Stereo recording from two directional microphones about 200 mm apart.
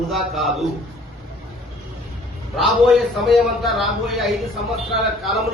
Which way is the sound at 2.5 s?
Centre (ahead or behind).